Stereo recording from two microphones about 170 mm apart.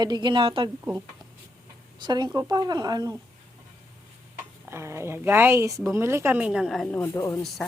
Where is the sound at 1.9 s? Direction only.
25° right (ahead or behind).